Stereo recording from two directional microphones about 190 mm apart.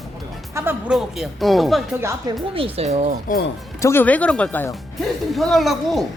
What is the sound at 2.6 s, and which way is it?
Speech, 30° right (ahead or behind).